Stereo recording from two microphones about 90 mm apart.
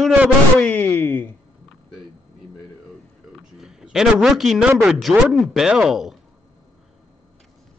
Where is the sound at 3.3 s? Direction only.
5° right (ahead or behind).